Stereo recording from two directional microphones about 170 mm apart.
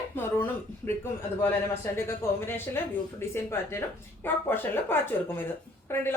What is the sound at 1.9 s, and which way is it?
A woman's voice, 15° left (ahead or behind).